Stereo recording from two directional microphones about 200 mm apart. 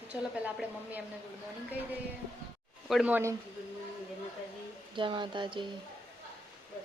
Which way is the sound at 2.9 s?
5° right (ahead or behind).